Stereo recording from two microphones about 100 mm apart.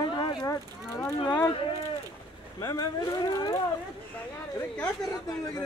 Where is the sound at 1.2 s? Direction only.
40° left (ahead or behind).